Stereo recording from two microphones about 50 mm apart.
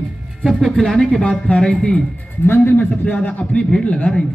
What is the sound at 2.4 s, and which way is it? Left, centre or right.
A man's voice, left.